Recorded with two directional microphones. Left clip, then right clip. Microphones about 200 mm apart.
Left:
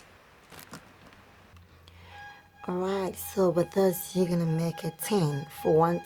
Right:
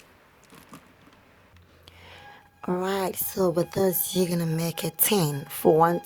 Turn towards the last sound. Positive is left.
turn(degrees=-35)  # may be behind; listen again after turning